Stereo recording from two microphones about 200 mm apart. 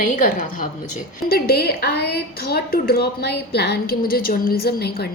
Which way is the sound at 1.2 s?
50° left (ahead or behind).